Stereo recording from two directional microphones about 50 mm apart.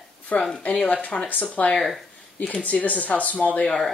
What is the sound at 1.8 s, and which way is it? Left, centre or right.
Speech, centre.